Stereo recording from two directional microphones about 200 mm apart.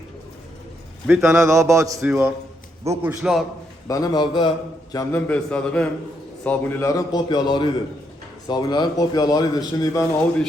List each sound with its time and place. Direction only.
1.0 s a man's voice: 10° right (ahead or behind)
3.8 s a man's voice: 20° left (ahead or behind)